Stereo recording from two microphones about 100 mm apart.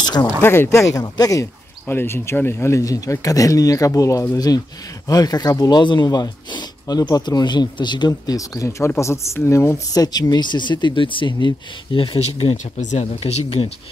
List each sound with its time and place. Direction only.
0.0 s speech: 45° left (ahead or behind)
0.4 s speech: 25° left (ahead or behind)
1.0 s speech: 40° left (ahead or behind)
1.9 s speech: 20° left (ahead or behind); by 8.1 s 50° left (ahead or behind)
8.1 s speech: 35° left (ahead or behind)
9.9 s speech: 40° left (ahead or behind)
12.2 s speech: 70° left (ahead or behind)
13.0 s speech: 90° left